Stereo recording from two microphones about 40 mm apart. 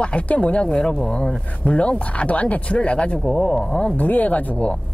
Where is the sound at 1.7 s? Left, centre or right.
Left.